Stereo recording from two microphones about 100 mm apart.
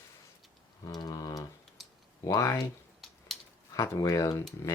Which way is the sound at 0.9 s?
40° left (ahead or behind).